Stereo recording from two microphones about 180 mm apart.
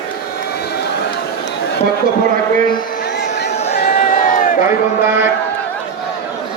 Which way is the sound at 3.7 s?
55° left (ahead or behind).